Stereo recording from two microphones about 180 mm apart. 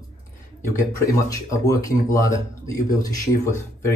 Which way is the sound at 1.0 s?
20° left (ahead or behind).